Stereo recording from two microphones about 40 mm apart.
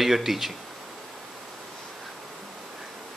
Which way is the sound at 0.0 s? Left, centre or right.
Centre.